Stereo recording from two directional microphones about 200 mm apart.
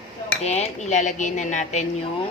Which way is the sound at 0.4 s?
35° left (ahead or behind).